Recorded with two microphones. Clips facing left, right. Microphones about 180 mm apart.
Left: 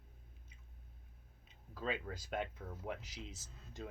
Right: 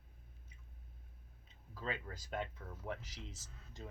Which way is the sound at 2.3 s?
20° left (ahead or behind).